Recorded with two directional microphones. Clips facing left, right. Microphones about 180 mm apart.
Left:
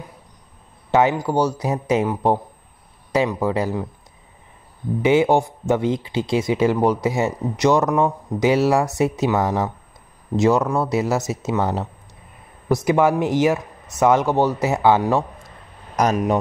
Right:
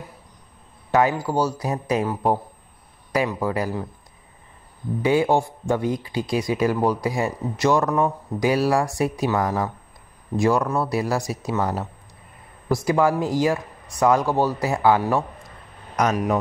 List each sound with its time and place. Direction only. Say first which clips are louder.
0.9 s speech: left 2 dB; 20° left (ahead or behind)
5.0 s speech: left 3 dB; 20° left (ahead or behind)
16.0 s speech: left 2 dB; 35° left (ahead or behind)